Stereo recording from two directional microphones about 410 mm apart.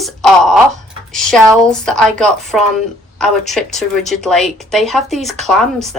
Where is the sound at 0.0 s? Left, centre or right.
Centre.